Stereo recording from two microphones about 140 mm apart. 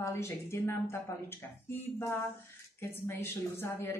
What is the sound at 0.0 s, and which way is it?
Speech, 20° left (ahead or behind).